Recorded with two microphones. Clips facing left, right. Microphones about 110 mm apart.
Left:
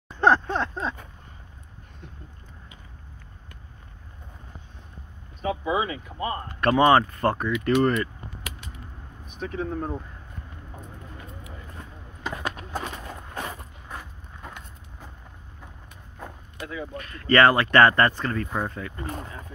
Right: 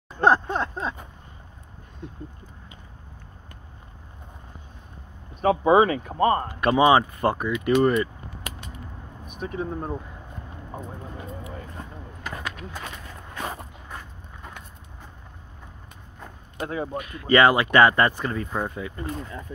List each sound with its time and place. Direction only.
0.2 s speech: 10° right (ahead or behind)
5.4 s speech: 60° right (ahead or behind)
6.5 s speech: 10° right (ahead or behind)
9.3 s vehicle: 45° right (ahead or behind)
9.6 s speech: 15° right (ahead or behind)
12.4 s a sound: 35° left (ahead or behind)
16.5 s speech: 55° right (ahead or behind)
16.9 s speech: 15° right (ahead or behind)